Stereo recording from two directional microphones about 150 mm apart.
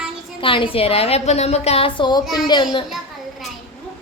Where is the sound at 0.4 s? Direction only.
35° left (ahead or behind).